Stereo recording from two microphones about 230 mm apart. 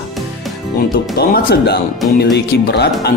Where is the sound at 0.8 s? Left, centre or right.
Left.